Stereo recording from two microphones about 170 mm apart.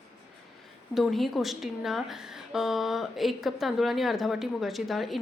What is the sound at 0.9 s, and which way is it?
Speech, centre (ahead or behind).